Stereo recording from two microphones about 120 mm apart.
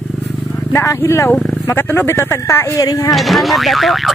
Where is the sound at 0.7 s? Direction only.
30° left (ahead or behind).